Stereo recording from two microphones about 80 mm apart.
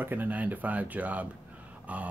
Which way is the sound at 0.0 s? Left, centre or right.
Right.